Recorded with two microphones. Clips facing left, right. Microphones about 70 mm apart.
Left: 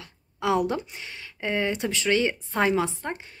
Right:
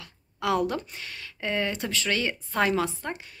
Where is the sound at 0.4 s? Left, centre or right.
Left.